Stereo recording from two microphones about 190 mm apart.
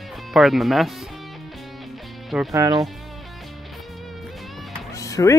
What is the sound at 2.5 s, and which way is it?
Speech, 20° right (ahead or behind).